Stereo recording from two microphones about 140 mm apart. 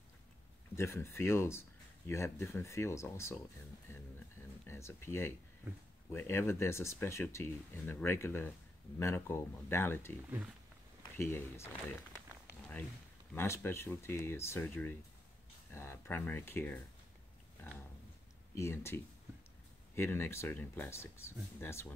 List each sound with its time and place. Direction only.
0.7 s speech: 20° left (ahead or behind)
4.6 s speech: 20° left (ahead or behind)
11.1 s speech: 20° left (ahead or behind)
13.3 s speech: 20° left (ahead or behind)
18.5 s speech: 20° left (ahead or behind)
20.0 s speech: 15° left (ahead or behind)